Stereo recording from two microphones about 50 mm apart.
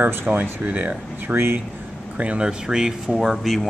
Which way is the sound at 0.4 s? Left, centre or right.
Right.